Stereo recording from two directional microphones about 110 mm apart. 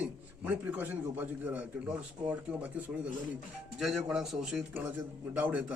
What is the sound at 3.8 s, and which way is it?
Speech, 5° right (ahead or behind).